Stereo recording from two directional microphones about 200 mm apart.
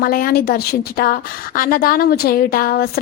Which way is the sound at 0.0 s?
45° left (ahead or behind).